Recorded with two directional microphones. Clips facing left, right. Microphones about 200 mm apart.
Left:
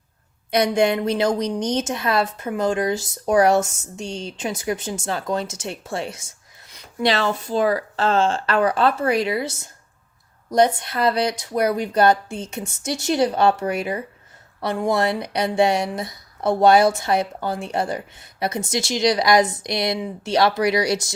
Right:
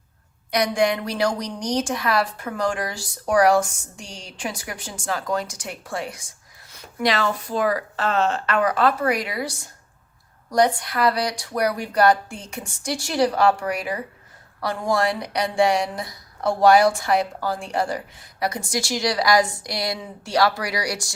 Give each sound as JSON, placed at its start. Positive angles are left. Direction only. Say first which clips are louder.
{"t": 0.5, "sound": "a woman's voice", "louder": "left 3 dB", "side_deg": 25}